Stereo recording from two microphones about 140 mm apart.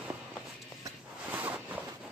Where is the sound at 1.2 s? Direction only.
10° right (ahead or behind).